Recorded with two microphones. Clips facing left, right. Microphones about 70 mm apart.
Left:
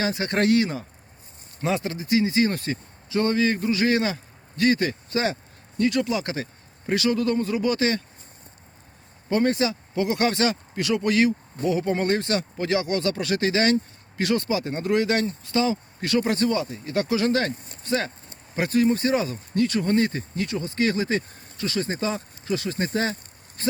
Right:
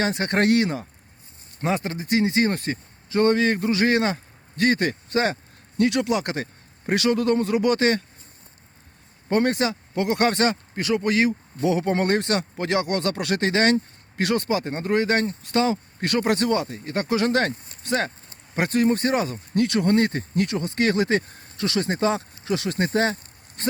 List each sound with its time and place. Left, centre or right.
0.0 s speech: right
1.6 s a man's voice: right
9.3 s speech: right
11.3 s speech: right